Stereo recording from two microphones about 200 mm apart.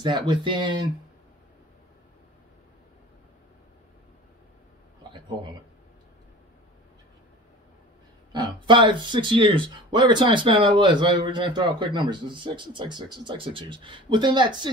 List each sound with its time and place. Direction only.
0.0 s speech: 20° right (ahead or behind)
5.1 s a sound: 25° right (ahead or behind)
8.3 s speech: 20° right (ahead or behind)